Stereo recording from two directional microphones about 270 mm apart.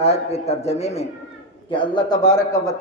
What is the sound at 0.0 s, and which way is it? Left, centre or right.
A man's voice, left.